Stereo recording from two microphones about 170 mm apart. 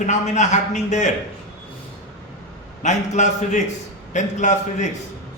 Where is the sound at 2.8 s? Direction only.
45° left (ahead or behind).